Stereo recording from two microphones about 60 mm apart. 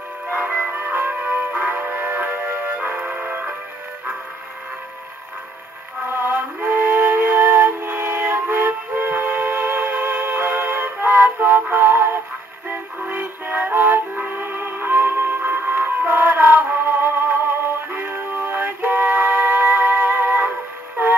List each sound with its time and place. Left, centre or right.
0.5 s music: right
2.0 s music: right
2.9 s music: centre
3.3 s music: right
6.1 s music: right
11.7 s synthetic singing: right
13.1 s music: right